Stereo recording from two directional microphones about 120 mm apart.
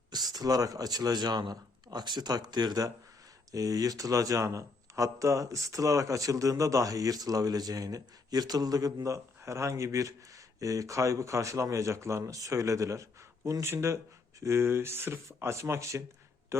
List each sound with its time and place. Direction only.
0.1 s speech: 35° right (ahead or behind)